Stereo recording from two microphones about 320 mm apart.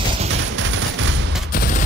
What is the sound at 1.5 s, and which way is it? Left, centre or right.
Fusillade, left.